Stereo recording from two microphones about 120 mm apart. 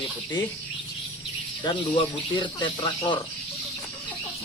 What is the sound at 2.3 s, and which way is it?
Speech, 40° left (ahead or behind).